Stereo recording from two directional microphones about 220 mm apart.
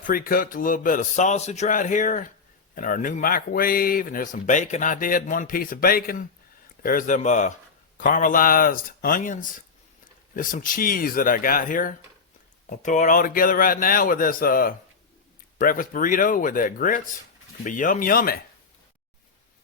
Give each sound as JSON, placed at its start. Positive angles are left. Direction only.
{"t": 0.1, "sound": "speech", "side_deg": 40}